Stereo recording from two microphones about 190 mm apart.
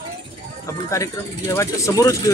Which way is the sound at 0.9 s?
15° left (ahead or behind).